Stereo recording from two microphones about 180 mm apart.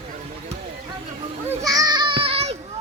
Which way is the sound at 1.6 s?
20° right (ahead or behind).